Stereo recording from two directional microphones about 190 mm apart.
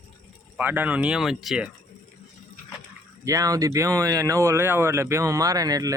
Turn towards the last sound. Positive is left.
turn(degrees=-20)  # may be behind; listen again after turning